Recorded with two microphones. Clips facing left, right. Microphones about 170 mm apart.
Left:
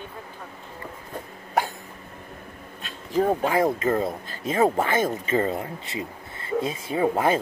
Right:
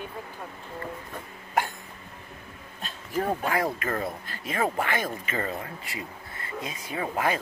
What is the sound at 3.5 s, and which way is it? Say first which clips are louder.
Speech: left 6 dB; 20° left (ahead or behind).